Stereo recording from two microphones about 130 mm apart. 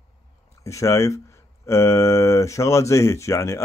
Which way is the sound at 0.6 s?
20° left (ahead or behind).